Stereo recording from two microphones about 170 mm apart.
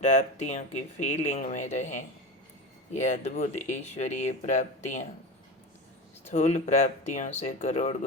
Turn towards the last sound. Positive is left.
turn(degrees=45)  # may be behind; listen again after turning